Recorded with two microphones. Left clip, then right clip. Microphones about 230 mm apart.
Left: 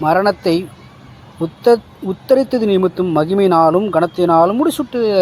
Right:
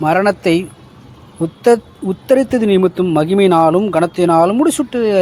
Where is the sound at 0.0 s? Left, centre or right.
Right.